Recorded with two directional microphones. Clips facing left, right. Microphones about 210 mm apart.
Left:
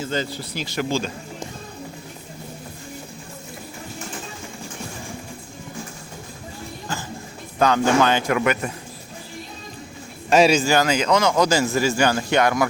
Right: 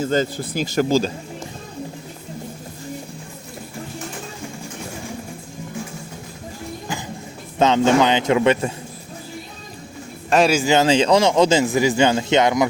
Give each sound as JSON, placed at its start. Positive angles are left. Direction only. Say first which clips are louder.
{"t": 0.0, "sound": "speech", "louder": "right 6 dB", "side_deg": -45}
{"t": 7.6, "sound": "speech", "louder": "right 2 dB", "side_deg": -20}
{"t": 10.2, "sound": "speech", "louder": "left 1 dB", "side_deg": 0}
{"t": 10.6, "sound": "speech", "louder": "right 4 dB", "side_deg": -20}